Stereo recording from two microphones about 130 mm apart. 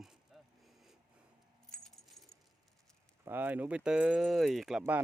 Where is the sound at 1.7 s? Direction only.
5° left (ahead or behind).